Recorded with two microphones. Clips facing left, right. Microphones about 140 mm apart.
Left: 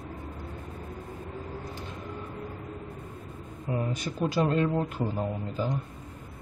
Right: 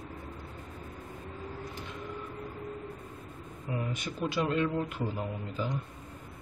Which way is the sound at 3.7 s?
35° left (ahead or behind).